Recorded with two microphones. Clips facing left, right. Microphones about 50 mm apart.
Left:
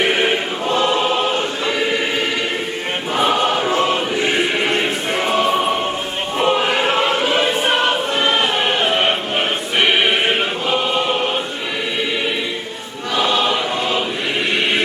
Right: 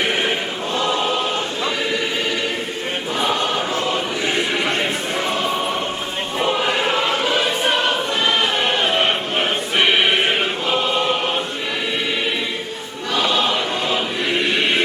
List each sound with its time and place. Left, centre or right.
0.1 s choir: left
3.2 s choir: left
6.4 s choir: centre
13.1 s choir: centre